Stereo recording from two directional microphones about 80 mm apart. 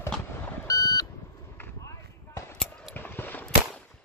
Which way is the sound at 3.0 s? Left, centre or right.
Left.